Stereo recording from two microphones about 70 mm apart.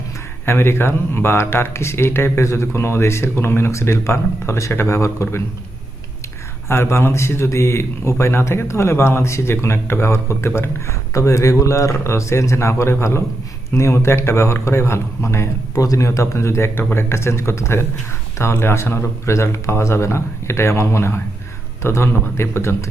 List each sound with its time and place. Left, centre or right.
0.4 s a man's voice: left
6.7 s a man's voice: left